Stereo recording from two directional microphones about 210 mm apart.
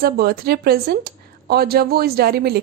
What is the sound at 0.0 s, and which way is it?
A woman's voice, 45° right (ahead or behind).